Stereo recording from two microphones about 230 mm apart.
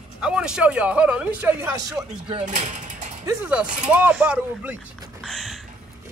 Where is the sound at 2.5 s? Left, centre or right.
Right.